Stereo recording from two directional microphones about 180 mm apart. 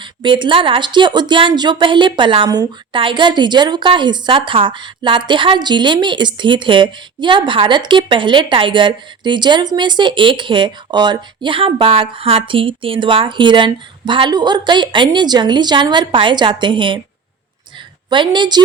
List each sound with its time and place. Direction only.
0.0 s a woman's voice: 25° right (ahead or behind)
18.1 s a woman's voice: 25° right (ahead or behind)